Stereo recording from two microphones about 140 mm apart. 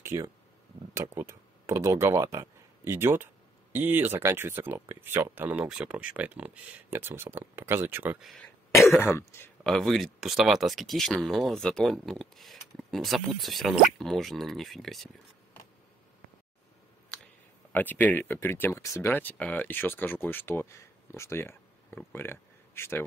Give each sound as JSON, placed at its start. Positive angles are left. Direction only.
{"t": 0.1, "sound": "speech", "side_deg": -25}
{"t": 8.9, "sound": "speech", "side_deg": 15}
{"t": 9.6, "sound": "speech", "side_deg": 5}
{"t": 17.7, "sound": "speech", "side_deg": 15}